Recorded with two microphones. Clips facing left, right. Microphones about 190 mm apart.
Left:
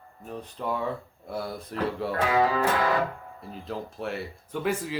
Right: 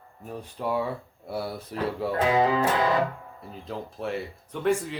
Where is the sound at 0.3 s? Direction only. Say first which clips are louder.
Right 2 dB; 10° right (ahead or behind).